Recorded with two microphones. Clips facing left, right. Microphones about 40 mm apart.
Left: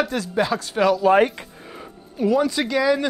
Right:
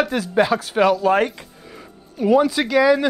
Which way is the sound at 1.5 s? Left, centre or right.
Centre.